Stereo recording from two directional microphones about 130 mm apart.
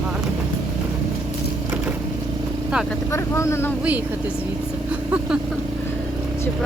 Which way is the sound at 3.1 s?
20° left (ahead or behind).